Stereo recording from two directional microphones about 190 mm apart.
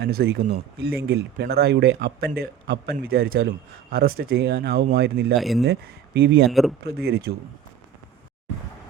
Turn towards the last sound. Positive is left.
turn(degrees=-55)  # may be behind; listen again after turning